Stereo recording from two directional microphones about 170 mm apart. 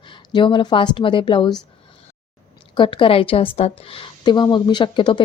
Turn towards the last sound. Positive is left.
turn(degrees=30)  # may be behind; listen again after turning